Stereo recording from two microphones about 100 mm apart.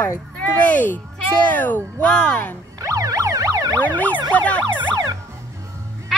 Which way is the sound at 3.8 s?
15° left (ahead or behind).